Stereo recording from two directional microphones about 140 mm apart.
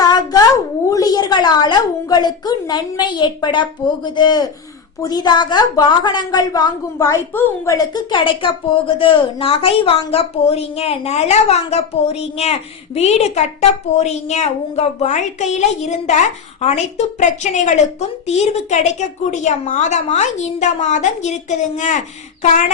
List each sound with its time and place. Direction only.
0.0 s a woman's voice: 30° left (ahead or behind); by 22.0 s 60° left (ahead or behind)